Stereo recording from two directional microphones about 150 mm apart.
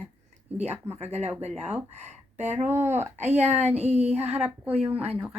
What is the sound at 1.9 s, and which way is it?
Speech, 50° right (ahead or behind).